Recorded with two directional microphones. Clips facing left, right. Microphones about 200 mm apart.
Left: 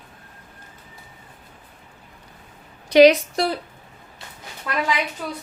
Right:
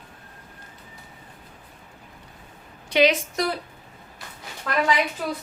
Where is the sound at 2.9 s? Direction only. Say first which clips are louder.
Left 8 dB; 40° left (ahead or behind).